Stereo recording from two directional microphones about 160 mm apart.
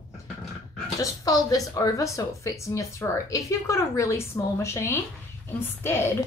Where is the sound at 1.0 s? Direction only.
20° left (ahead or behind).